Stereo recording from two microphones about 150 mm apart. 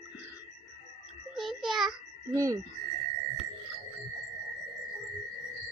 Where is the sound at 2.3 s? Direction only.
20° right (ahead or behind).